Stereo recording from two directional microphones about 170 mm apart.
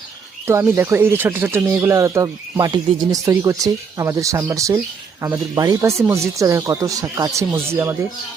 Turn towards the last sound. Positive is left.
turn(degrees=-15)  # may be behind; listen again after turning